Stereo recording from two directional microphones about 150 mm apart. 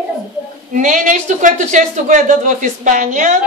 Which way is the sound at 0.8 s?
55° right (ahead or behind).